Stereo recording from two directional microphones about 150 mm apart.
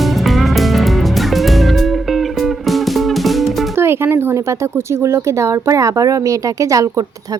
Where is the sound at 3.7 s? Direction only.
15° right (ahead or behind).